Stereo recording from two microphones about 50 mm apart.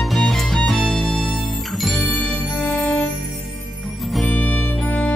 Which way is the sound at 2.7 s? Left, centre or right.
Left.